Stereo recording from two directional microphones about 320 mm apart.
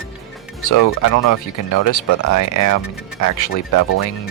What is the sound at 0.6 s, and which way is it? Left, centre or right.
Speech, left.